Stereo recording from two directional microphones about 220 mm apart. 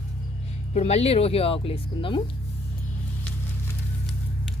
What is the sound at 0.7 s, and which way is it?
A woman's voice, 30° left (ahead or behind).